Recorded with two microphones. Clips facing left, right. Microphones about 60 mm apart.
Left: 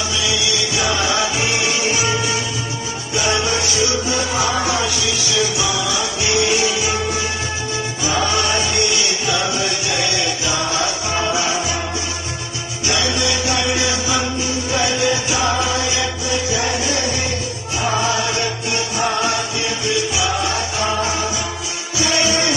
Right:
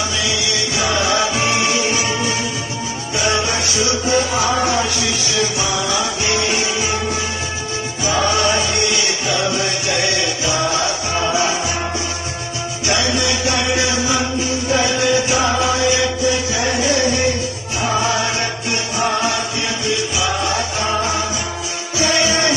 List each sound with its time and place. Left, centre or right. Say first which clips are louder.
0.7 s music: right 2 dB; right
3.3 s music: even; right
12.8 s music: right 1 dB; right
20.2 s music: right 1 dB; right
21.9 s music: right 1 dB; right